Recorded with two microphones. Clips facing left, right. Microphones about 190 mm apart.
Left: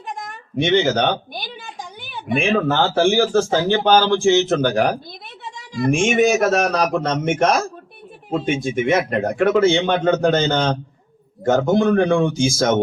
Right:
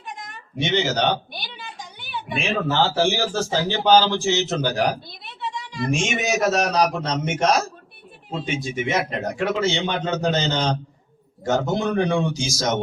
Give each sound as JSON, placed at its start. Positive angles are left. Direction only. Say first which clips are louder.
{"t": 0.2, "sound": "a man's voice", "louder": "left 6 dB", "side_deg": 55}